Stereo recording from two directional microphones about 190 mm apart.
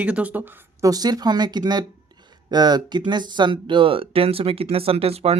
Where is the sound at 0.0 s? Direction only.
5° right (ahead or behind).